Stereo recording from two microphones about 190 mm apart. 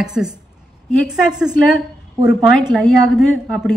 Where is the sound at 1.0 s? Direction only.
5° right (ahead or behind).